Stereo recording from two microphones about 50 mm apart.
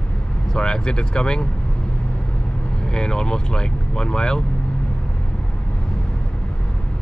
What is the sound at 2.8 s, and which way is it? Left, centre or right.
Speech, centre.